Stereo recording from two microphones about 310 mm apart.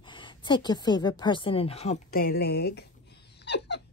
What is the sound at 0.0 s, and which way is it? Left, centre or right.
Speech, centre.